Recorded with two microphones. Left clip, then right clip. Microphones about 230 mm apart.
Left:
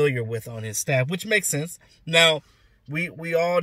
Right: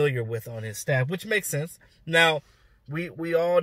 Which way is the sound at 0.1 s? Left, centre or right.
Centre.